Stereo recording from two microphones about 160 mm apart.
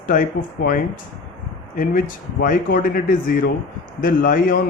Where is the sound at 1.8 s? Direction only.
60° left (ahead or behind).